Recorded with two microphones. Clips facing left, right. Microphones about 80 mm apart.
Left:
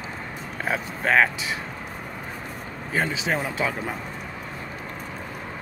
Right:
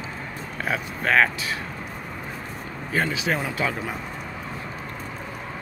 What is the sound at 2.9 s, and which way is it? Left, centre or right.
Speech, left.